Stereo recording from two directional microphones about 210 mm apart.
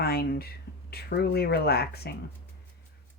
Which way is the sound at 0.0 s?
45° left (ahead or behind).